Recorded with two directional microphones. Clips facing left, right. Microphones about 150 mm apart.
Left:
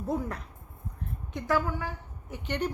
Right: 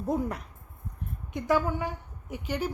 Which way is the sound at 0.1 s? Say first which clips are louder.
Right 3 dB; 15° right (ahead or behind).